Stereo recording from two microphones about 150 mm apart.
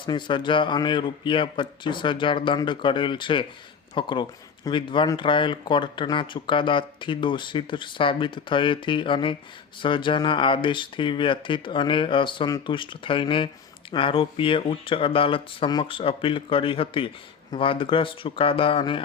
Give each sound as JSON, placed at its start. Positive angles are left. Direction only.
{"t": 0.0, "sound": "speech", "side_deg": 30}